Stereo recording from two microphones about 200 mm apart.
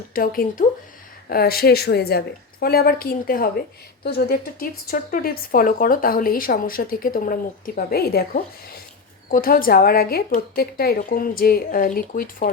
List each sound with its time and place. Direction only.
0.1 s speech: 45° left (ahead or behind)